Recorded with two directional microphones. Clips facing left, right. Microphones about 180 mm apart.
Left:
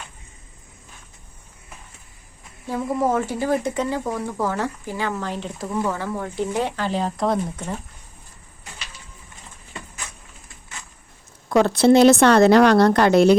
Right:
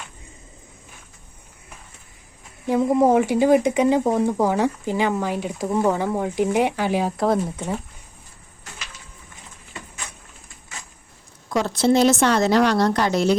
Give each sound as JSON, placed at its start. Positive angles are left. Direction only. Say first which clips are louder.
{"t": 2.6, "sound": "speech", "louder": "right 5 dB", "side_deg": -20}
{"t": 11.4, "sound": "speech", "louder": "left 4 dB", "side_deg": 60}